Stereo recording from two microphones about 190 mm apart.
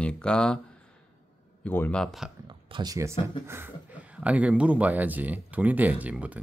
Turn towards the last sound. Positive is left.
turn(degrees=-5)  # may be behind; listen again after turning